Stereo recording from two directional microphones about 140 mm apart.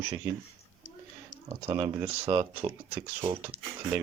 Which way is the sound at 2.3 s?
15° right (ahead or behind).